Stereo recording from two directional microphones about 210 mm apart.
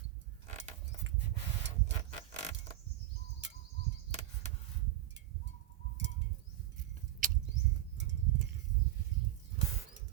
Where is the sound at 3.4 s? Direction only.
60° right (ahead or behind).